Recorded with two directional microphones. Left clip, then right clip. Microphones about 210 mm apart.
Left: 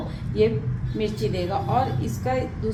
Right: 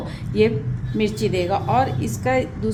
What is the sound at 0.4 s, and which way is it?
A woman's voice, 40° right (ahead or behind).